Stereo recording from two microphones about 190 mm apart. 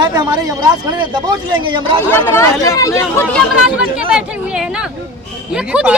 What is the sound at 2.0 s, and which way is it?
Speech, 10° left (ahead or behind).